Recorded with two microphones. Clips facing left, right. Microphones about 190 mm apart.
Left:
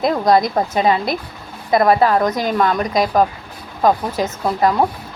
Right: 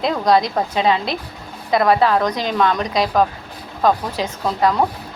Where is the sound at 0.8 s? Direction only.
10° left (ahead or behind).